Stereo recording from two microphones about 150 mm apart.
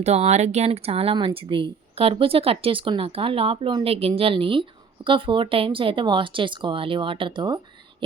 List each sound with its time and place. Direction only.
0.0 s speech: 45° right (ahead or behind); by 7.6 s 30° right (ahead or behind)